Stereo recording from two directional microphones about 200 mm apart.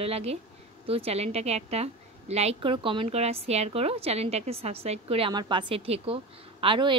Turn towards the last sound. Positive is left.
turn(degrees=-25)  # may be behind; listen again after turning